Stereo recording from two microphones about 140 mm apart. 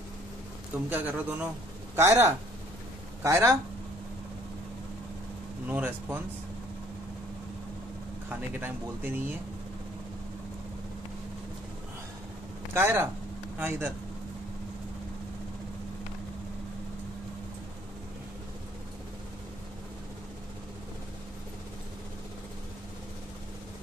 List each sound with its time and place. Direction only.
0.8 s speech: 10° right (ahead or behind)
5.7 s speech: 10° right (ahead or behind)
8.3 s speech: 10° right (ahead or behind)
12.7 s speech: 15° right (ahead or behind)